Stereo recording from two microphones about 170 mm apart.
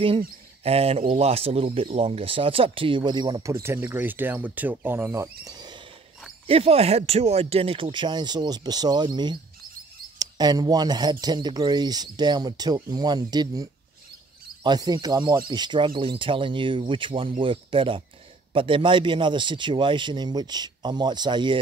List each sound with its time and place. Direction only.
0.7 s speech: 35° right (ahead or behind)
6.4 s speech: 35° right (ahead or behind)